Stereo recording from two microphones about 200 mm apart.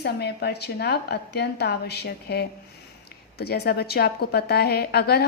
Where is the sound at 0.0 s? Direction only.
55° left (ahead or behind).